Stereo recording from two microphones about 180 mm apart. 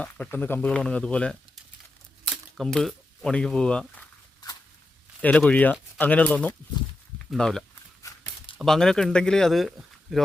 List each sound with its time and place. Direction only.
0.0 s speech: 10° left (ahead or behind)
2.6 s speech: centre (ahead or behind)
5.2 s speech: 5° left (ahead or behind)
8.0 s a sound: 15° left (ahead or behind)
8.5 s speech: centre (ahead or behind)